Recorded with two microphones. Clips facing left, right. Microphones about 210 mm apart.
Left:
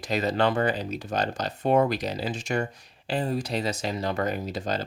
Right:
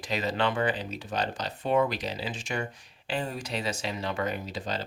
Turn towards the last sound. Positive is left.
turn(degrees=45)  # may be behind; listen again after turning